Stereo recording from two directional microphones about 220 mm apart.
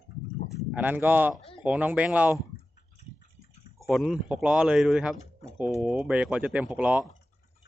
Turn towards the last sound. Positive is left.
turn(degrees=-5)  # may be behind; listen again after turning